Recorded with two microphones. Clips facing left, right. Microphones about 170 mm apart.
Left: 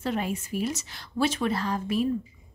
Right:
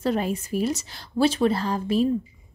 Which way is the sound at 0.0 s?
35° right (ahead or behind).